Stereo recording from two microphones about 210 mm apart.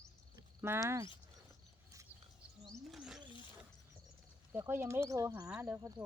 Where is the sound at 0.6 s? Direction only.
10° right (ahead or behind).